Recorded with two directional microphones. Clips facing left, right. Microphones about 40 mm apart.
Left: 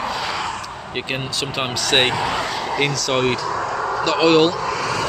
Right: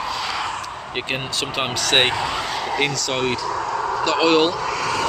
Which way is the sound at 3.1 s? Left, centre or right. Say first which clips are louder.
Left 6 dB; centre.